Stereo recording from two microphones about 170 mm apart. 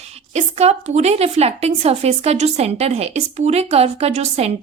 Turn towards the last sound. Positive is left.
turn(degrees=-40)  # may be behind; listen again after turning